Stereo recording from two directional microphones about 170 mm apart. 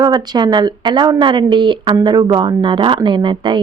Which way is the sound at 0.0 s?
25° right (ahead or behind).